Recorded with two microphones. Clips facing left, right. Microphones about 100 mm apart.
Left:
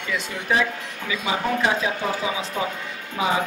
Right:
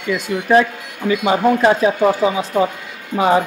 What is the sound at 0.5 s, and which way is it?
Speech, 50° right (ahead or behind).